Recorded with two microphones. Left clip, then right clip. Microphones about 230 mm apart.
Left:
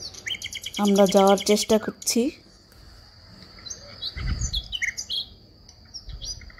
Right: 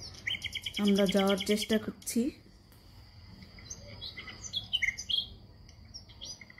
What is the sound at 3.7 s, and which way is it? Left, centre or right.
Wild animals, centre.